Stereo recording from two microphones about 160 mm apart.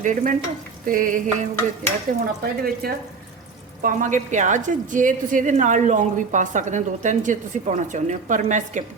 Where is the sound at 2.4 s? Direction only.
65° right (ahead or behind).